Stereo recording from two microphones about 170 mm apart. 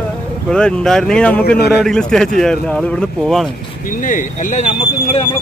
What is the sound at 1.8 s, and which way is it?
Speech, 5° left (ahead or behind).